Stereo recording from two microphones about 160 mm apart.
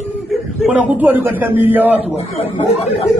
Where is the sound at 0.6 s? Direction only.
5° right (ahead or behind).